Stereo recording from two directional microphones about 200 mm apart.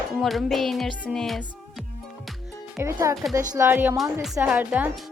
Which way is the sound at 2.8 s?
15° right (ahead or behind).